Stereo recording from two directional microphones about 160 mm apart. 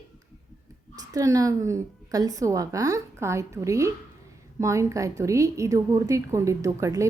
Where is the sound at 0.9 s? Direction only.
20° right (ahead or behind).